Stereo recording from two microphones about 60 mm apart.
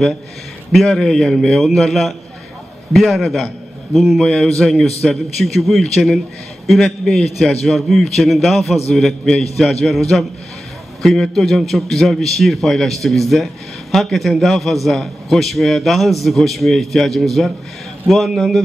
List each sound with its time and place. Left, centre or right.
0.8 s a man's voice: centre
4.2 s a man's voice: centre